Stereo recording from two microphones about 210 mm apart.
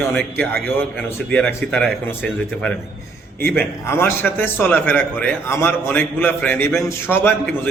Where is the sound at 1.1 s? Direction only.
5° left (ahead or behind).